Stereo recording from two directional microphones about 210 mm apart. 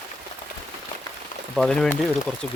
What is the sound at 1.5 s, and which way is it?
Speech, centre (ahead or behind).